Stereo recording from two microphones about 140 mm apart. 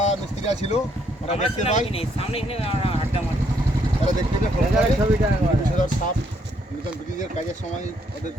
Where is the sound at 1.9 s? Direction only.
45° left (ahead or behind).